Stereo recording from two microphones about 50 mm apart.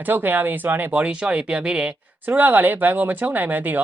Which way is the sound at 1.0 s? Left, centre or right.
Right.